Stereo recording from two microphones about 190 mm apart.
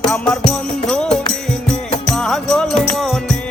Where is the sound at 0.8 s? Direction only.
5° left (ahead or behind).